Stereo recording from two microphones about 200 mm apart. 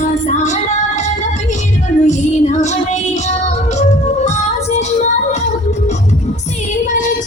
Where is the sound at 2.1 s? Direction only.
35° left (ahead or behind).